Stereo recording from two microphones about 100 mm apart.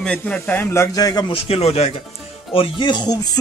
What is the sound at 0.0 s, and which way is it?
Speech, 15° left (ahead or behind).